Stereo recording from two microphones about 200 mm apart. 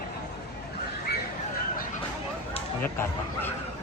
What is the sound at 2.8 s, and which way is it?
Speech, 10° left (ahead or behind).